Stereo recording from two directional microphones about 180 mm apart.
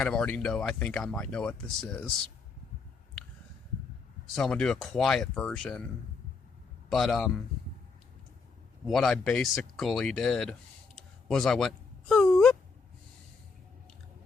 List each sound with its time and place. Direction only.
0.0 s speech: 5° left (ahead or behind)
4.4 s speech: 5° left (ahead or behind)
6.9 s speech: centre (ahead or behind)
8.9 s speech: centre (ahead or behind)
10.9 s a sound: 5° left (ahead or behind)